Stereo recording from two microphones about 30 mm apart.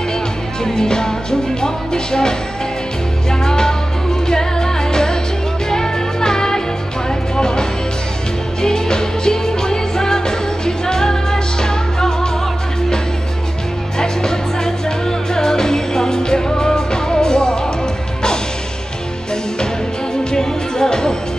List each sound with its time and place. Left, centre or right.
0.7 s music: left
13.9 s music: left
20.2 s music: centre